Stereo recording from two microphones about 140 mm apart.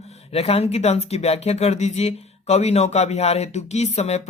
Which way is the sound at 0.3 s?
45° left (ahead or behind).